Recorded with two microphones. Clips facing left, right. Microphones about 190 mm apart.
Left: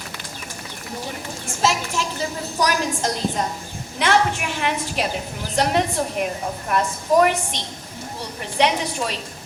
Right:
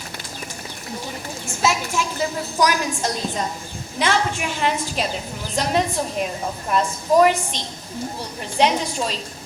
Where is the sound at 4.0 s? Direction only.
60° left (ahead or behind).